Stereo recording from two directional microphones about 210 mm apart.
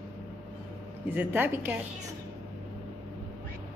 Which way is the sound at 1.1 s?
10° right (ahead or behind).